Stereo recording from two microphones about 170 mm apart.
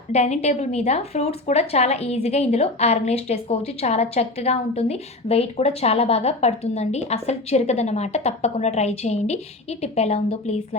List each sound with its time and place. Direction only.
0.1 s a woman's voice: 40° left (ahead or behind)